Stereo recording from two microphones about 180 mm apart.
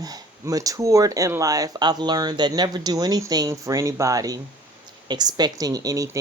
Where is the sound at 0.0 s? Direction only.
20° right (ahead or behind).